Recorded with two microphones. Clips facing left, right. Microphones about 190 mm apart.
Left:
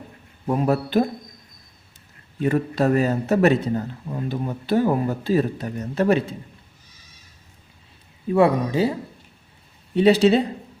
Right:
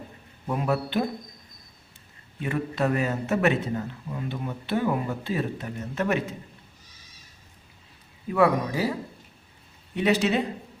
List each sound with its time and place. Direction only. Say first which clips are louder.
0.4 s speech: left 5 dB; 35° left (ahead or behind)
2.4 s speech: left 6 dB; 40° left (ahead or behind)
8.3 s speech: left 4 dB; 25° left (ahead or behind)
9.9 s speech: left 8 dB; 30° left (ahead or behind)